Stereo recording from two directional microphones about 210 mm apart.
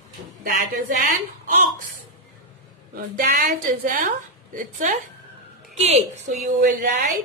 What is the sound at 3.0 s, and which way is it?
Mantra, 45° right (ahead or behind).